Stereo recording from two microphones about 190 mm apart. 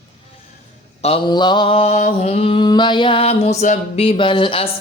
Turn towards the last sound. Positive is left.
turn(degrees=25)  # may be behind; listen again after turning